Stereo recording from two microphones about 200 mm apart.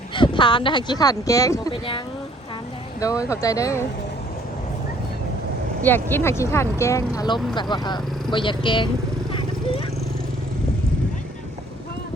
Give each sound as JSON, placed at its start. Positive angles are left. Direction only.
{"t": 0.1, "sound": "speech", "side_deg": 25}
{"t": 3.0, "sound": "speech", "side_deg": 15}
{"t": 5.8, "sound": "speech", "side_deg": 10}